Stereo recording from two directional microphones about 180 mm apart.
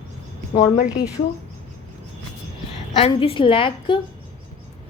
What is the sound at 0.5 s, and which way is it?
Speech, 30° left (ahead or behind).